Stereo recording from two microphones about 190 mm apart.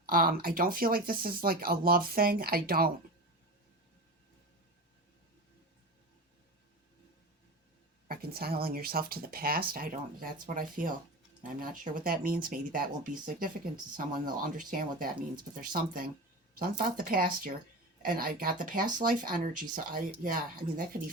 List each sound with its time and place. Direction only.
0.0 s speech: 50° right (ahead or behind)
8.0 s speech: 50° right (ahead or behind)